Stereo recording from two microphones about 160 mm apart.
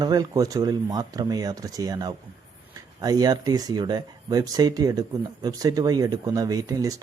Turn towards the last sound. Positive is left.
turn(degrees=-20)  # may be behind; listen again after turning